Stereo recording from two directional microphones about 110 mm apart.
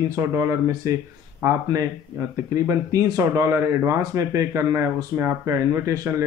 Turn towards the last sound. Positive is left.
turn(degrees=-25)  # may be behind; listen again after turning